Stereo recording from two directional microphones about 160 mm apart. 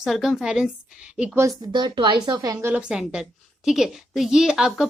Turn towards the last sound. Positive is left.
turn(degrees=-5)  # may be behind; listen again after turning